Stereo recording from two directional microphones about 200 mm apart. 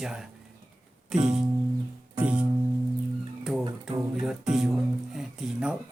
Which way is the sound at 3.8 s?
5° right (ahead or behind).